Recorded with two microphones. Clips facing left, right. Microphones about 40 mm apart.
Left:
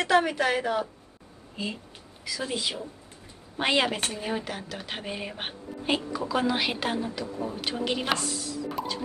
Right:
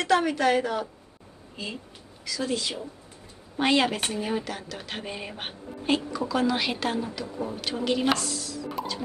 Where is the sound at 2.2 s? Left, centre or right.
Centre.